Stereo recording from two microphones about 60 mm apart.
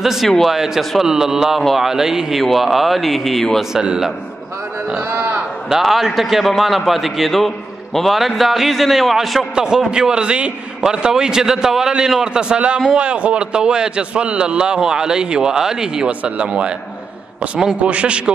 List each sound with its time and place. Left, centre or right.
0.0 s a man's voice: centre
3.7 s a man's voice: centre
5.1 s sheep: right
5.7 s a man's voice: centre
17.8 s a man's voice: centre